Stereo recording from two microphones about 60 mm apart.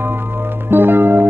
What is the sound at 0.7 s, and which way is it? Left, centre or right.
Music, right.